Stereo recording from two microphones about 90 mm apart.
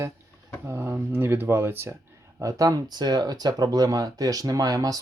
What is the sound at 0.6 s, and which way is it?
Speech, 25° right (ahead or behind).